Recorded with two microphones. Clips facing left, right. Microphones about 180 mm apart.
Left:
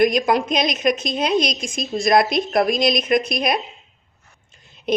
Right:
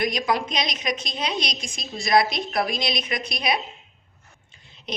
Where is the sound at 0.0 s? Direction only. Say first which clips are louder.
Left 7 dB; 50° left (ahead or behind).